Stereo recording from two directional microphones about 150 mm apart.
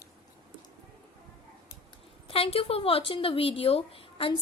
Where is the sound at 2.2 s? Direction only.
40° left (ahead or behind).